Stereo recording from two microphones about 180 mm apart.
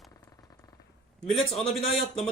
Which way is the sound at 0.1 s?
20° left (ahead or behind).